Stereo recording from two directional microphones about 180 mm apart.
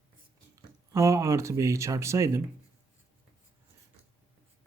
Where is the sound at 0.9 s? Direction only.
15° right (ahead or behind).